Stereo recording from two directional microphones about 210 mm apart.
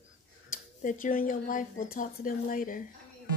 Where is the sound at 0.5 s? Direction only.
40° left (ahead or behind).